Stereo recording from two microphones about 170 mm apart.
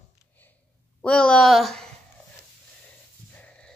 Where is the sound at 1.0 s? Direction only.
5° left (ahead or behind).